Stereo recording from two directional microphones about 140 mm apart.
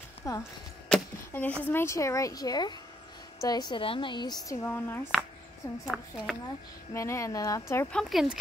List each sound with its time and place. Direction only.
0.2 s speech: 20° left (ahead or behind)
0.8 s speech: 10° left (ahead or behind)
5.9 s speech: centre (ahead or behind)
6.9 s speech: 20° left (ahead or behind)
7.9 s speech: centre (ahead or behind)